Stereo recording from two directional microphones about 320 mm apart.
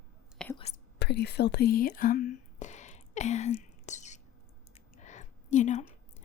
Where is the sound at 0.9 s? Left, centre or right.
Left.